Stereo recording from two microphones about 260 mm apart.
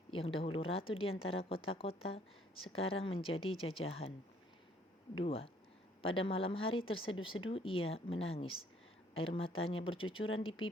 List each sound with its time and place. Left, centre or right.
0.1 s a woman's voice: left
5.2 s a woman's voice: left